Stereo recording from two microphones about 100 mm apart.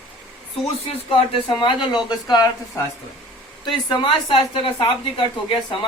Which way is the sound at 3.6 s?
55° left (ahead or behind).